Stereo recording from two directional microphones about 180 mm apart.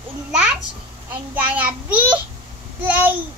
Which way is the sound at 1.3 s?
10° right (ahead or behind).